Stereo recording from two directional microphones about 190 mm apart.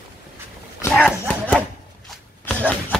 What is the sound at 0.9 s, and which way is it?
Dog, 5° left (ahead or behind).